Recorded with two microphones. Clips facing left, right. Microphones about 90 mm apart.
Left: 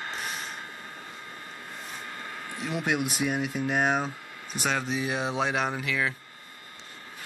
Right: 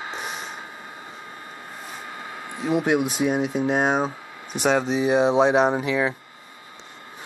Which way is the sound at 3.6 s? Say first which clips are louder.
Right 3 dB; 25° right (ahead or behind).